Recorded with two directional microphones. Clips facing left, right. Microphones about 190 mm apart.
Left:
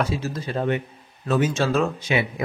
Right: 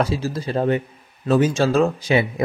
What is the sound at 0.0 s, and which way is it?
Speech, 35° right (ahead or behind).